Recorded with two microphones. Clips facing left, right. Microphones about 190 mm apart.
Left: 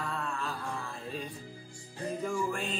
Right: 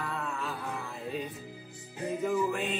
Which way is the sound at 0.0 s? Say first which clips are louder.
Even; 5° right (ahead or behind).